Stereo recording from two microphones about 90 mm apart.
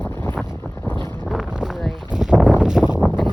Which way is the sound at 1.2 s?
5° right (ahead or behind).